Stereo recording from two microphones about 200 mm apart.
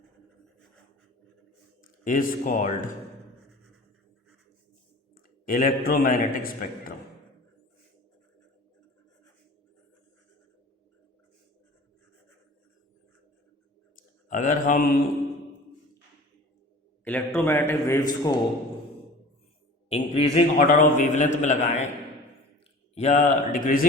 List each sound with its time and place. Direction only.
2.1 s a man's voice: 40° left (ahead or behind)
5.1 s a man's voice: 45° left (ahead or behind)
14.3 s speech: 40° left (ahead or behind)
17.0 s a man's voice: 10° left (ahead or behind)
19.9 s a man's voice: 30° left (ahead or behind)
23.0 s a man's voice: 35° left (ahead or behind)